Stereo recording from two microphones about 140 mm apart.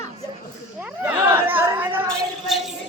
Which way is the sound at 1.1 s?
15° right (ahead or behind).